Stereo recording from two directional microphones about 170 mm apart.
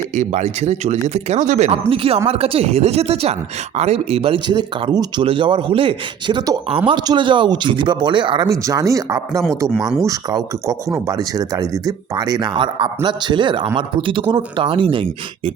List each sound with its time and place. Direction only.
0.1 s speech: 40° right (ahead or behind); by 9.4 s 20° right (ahead or behind)
9.7 s speech: 5° right (ahead or behind)
10.1 s speech: 20° right (ahead or behind)